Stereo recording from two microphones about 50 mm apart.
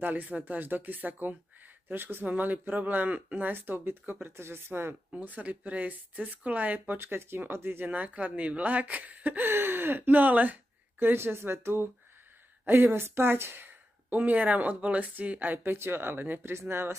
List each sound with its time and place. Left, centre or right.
0.0 s speech: right
2.2 s speech: right
5.2 s speech: right
7.0 s speech: right
7.9 s speech: right
9.5 s speech: right
11.0 s speech: right